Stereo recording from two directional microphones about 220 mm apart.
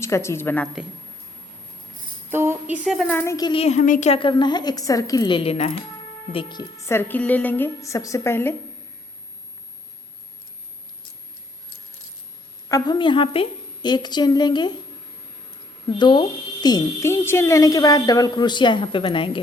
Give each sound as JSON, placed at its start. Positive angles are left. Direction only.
{"t": 0.0, "sound": "a woman's voice", "side_deg": 10}
{"t": 2.3, "sound": "a woman's voice", "side_deg": -10}
{"t": 12.6, "sound": "speech", "side_deg": 15}
{"t": 15.9, "sound": "speech", "side_deg": 20}